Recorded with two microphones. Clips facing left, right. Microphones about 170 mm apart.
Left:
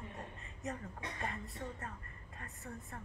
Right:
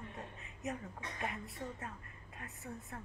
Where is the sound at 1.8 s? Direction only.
5° right (ahead or behind).